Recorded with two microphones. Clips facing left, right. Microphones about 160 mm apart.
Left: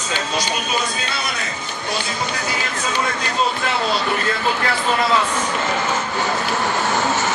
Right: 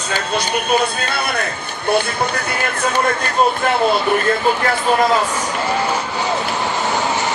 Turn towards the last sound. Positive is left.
turn(degrees=-15)  # may be behind; listen again after turning